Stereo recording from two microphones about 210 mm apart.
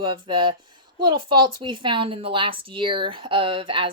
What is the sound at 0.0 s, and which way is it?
A woman's voice, 20° right (ahead or behind).